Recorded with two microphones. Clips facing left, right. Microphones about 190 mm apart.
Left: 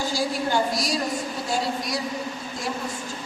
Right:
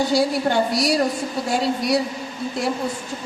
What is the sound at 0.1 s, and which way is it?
Speech, 65° right (ahead or behind).